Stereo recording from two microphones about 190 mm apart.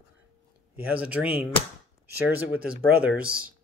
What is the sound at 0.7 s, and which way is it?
Speech, 5° right (ahead or behind).